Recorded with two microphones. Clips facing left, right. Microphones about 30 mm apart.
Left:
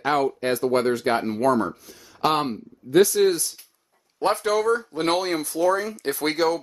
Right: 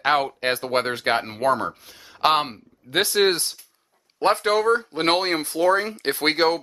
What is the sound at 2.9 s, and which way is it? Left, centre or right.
Speech, right.